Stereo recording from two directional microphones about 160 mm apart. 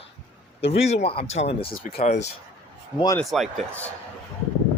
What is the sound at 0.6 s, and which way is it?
Speech, 40° left (ahead or behind).